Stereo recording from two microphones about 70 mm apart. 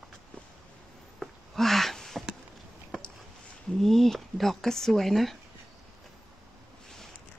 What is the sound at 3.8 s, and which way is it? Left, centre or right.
Speech, centre.